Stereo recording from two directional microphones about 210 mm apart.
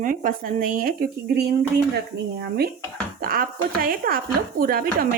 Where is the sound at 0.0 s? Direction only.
40° right (ahead or behind).